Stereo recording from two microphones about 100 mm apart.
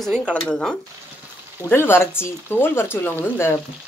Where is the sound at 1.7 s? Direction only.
25° left (ahead or behind).